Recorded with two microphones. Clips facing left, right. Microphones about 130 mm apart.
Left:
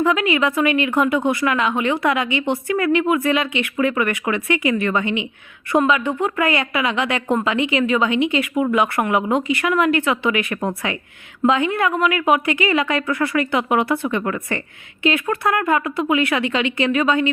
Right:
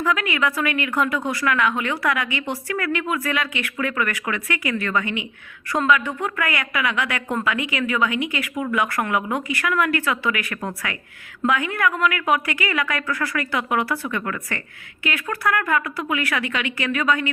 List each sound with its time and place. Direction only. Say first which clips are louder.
0.0 s speech: left 4 dB; 20° left (ahead or behind)